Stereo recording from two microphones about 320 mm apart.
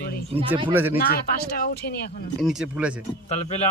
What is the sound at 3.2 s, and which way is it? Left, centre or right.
Speech, centre.